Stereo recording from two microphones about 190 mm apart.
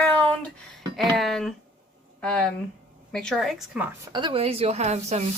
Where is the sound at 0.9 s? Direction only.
Centre (ahead or behind).